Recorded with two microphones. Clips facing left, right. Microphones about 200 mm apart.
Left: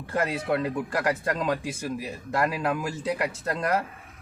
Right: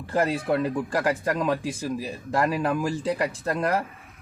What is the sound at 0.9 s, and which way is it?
Speech, 25° right (ahead or behind).